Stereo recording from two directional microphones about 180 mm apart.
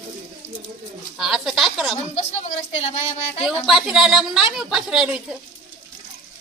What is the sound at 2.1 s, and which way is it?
Speech, 35° left (ahead or behind).